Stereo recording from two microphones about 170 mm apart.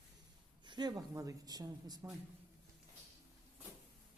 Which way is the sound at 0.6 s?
25° right (ahead or behind).